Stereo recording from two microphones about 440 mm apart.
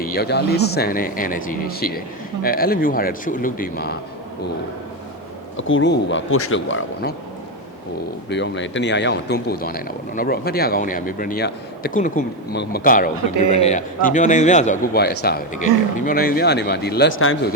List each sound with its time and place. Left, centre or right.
0.0 s speech: left
5.5 s speech: left
8.3 s speech: left